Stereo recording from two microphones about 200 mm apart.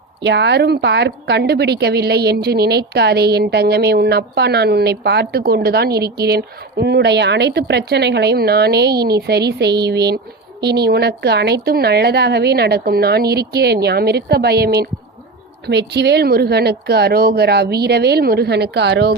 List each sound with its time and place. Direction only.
0.2 s a woman's voice: 60° right (ahead or behind)